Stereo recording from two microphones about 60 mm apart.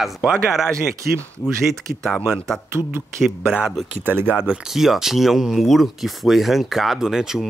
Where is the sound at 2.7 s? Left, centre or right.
Right.